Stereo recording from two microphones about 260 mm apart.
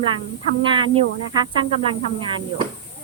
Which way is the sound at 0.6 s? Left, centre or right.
Centre.